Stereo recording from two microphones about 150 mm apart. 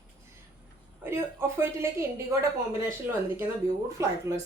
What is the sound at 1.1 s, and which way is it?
Speech, 15° right (ahead or behind).